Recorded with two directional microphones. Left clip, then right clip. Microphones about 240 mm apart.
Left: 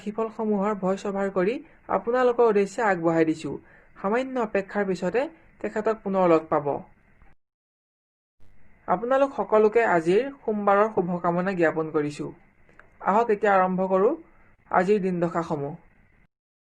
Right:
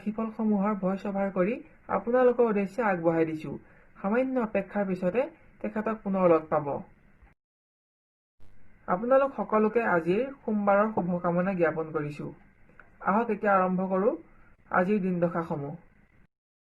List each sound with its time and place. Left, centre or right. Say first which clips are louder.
0.1 s speech: left 4 dB; left
8.9 s speech: left 2 dB; left